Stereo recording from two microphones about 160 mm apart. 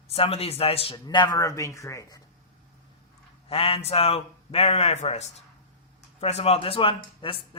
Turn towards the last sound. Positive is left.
turn(degrees=35)  # may be behind; listen again after turning